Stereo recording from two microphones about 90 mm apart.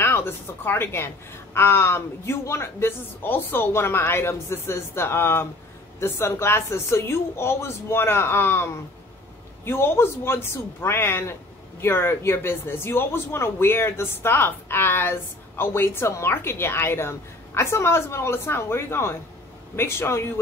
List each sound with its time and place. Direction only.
0.0 s a woman's voice: 25° left (ahead or behind)